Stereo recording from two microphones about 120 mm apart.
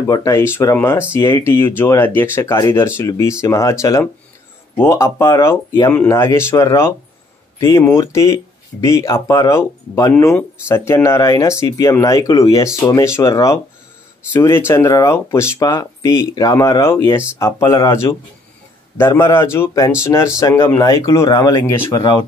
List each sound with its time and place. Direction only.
0.0 s speech: 25° left (ahead or behind)
4.7 s speech: 25° left (ahead or behind)